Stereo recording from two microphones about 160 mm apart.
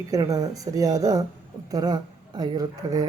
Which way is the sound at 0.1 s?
20° right (ahead or behind).